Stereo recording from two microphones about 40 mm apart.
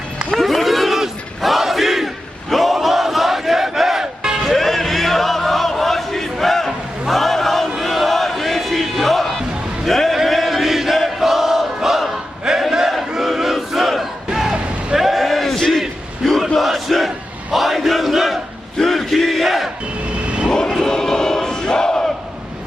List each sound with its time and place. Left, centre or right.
0.3 s battle cry: centre
4.0 s music: centre
4.4 s choir: centre
7.1 s a sound: centre
10.2 s chant: centre
12.5 s battle cry: centre
14.9 s a sound: centre
16.6 s battle cry: centre
20.2 s vehicle: right
20.7 s battle cry: centre